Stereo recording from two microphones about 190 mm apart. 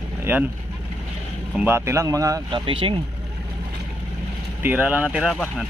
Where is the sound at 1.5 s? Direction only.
10° right (ahead or behind); by 2.9 s 30° right (ahead or behind).